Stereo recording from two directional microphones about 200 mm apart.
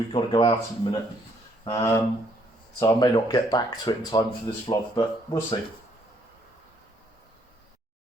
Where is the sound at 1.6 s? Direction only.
25° left (ahead or behind).